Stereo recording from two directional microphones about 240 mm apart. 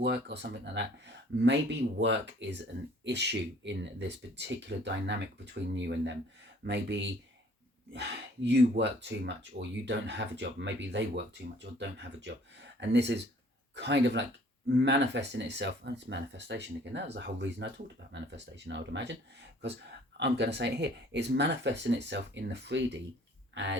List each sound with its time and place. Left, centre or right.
0.0 s speech: right
20.1 s speech: right